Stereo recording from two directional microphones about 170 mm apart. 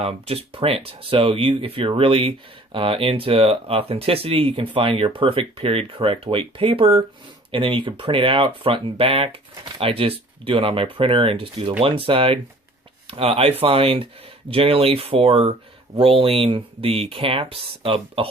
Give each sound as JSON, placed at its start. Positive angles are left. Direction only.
{"t": 0.0, "sound": "speech", "side_deg": -35}